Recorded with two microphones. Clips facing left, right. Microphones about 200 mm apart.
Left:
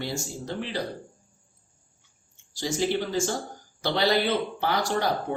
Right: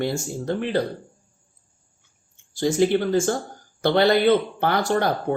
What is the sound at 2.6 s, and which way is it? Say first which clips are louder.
Speech: right 7 dB; 55° right (ahead or behind).